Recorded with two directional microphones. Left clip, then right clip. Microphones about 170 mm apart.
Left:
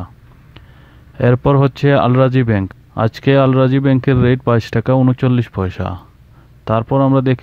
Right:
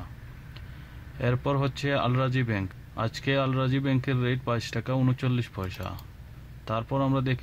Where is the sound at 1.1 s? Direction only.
45° left (ahead or behind).